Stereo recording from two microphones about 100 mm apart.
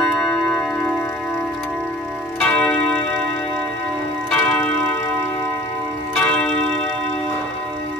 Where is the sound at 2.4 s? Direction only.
10° left (ahead or behind).